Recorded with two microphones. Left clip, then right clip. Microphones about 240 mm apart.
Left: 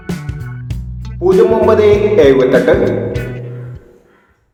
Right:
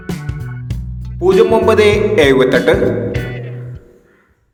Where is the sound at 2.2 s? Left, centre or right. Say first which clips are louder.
Left 1 dB; right.